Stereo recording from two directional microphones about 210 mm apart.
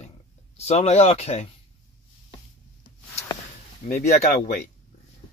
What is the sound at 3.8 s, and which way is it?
Speech, 35° left (ahead or behind).